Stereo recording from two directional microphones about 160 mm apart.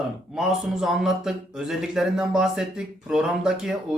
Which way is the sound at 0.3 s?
5° right (ahead or behind).